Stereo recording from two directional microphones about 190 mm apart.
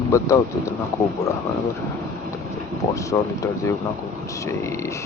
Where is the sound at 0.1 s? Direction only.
15° left (ahead or behind).